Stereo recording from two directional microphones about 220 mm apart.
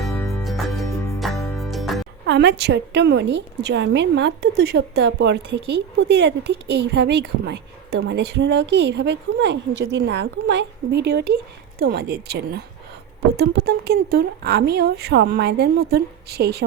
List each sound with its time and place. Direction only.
0.1 s music: 10° left (ahead or behind)
1.5 s music: centre (ahead or behind)
2.2 s a woman's voice: 50° right (ahead or behind)